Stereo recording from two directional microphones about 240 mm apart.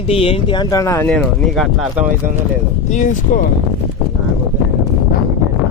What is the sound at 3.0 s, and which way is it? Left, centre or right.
Speech, left.